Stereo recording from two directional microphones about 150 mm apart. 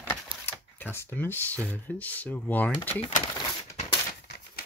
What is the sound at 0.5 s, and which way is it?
Speech, 10° left (ahead or behind).